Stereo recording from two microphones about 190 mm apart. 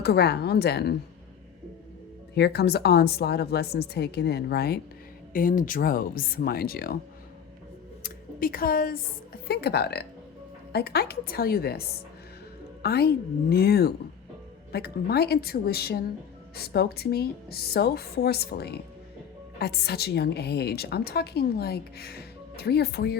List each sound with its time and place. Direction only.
0.0 s a woman's voice: 60° left (ahead or behind)
2.3 s a woman's voice: 60° left (ahead or behind)
8.0 s a sound: 50° left (ahead or behind)
9.5 s a woman's voice: 60° left (ahead or behind)
12.8 s a woman's voice: 55° left (ahead or behind)